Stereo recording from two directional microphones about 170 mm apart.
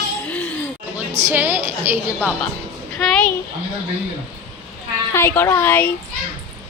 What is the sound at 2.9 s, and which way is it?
Speech, 5° left (ahead or behind).